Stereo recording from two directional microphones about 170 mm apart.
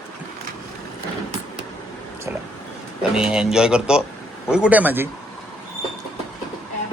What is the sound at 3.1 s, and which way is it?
Speech, 5° right (ahead or behind).